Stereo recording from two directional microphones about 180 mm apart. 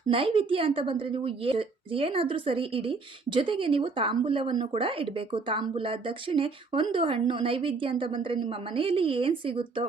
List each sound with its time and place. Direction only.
0.1 s a woman's voice: 30° right (ahead or behind)